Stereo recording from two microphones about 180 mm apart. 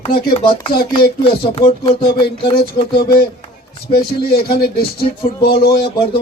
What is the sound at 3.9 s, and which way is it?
Speech, 60° left (ahead or behind).